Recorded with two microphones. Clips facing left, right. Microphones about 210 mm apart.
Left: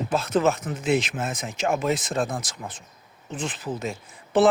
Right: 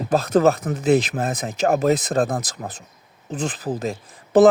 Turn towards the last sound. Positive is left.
turn(degrees=-40)  # may be behind; listen again after turning